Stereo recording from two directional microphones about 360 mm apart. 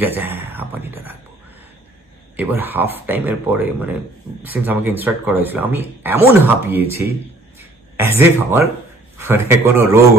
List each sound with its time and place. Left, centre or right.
0.0 s speech: centre
2.3 s a man's voice: centre